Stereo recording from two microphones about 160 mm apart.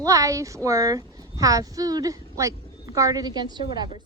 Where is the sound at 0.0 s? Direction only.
20° right (ahead or behind).